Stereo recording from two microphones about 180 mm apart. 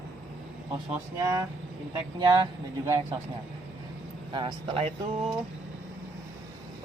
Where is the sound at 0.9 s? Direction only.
20° right (ahead or behind).